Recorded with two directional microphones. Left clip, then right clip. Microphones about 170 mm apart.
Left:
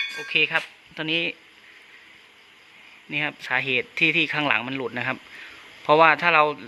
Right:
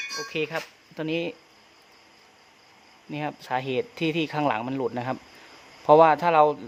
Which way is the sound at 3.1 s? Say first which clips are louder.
Left 4 dB; 15° right (ahead or behind).